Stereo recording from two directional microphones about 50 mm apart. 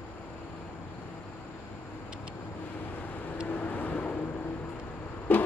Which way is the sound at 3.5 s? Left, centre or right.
Left.